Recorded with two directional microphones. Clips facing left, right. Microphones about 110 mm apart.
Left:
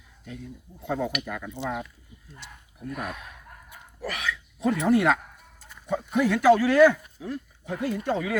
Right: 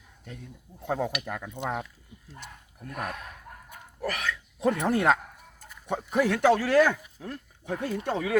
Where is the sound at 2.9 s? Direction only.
45° right (ahead or behind).